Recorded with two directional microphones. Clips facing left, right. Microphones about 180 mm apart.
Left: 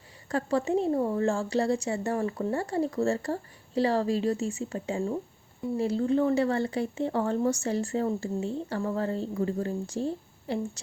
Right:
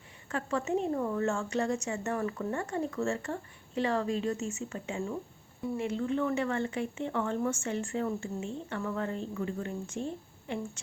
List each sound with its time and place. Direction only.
0.3 s a woman's voice: 35° left (ahead or behind)